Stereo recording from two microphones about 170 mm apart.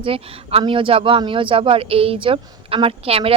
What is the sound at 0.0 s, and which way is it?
Speech, 30° right (ahead or behind).